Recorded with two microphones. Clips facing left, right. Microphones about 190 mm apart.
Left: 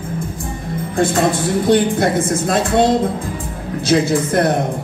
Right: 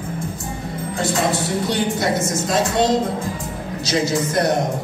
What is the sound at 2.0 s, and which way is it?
Speech, 55° left (ahead or behind).